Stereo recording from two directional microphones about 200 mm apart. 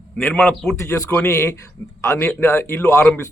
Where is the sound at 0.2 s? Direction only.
5° left (ahead or behind).